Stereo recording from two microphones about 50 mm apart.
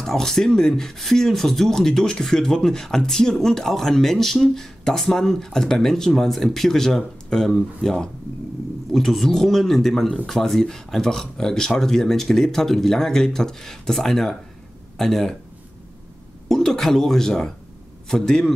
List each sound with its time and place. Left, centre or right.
0.0 s speech: centre
16.4 s a man's voice: centre